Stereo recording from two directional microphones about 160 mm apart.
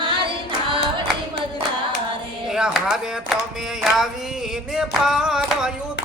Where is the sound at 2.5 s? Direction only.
5° right (ahead or behind).